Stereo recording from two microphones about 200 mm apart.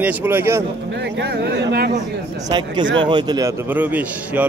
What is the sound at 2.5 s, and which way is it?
Speech, 20° right (ahead or behind).